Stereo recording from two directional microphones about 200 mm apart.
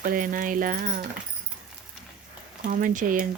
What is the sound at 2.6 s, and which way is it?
Speech, 40° right (ahead or behind).